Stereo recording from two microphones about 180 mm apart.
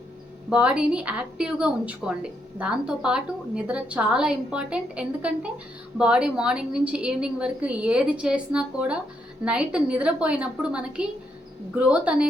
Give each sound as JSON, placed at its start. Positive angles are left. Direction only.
{"t": 0.5, "sound": "a woman's voice", "side_deg": -5}